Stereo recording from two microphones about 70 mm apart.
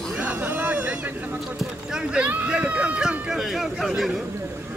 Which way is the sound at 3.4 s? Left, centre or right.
Centre.